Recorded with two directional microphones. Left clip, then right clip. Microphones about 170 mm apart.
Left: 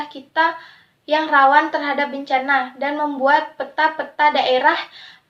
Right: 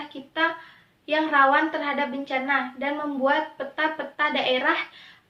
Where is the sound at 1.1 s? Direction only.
40° right (ahead or behind).